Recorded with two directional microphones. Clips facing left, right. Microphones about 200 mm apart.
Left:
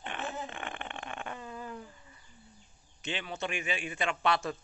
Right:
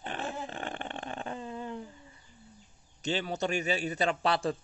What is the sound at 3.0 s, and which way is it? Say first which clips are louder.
Speech: right 5 dB; 40° right (ahead or behind).